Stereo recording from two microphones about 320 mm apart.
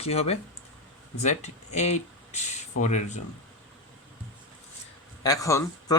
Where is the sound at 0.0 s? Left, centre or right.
Centre.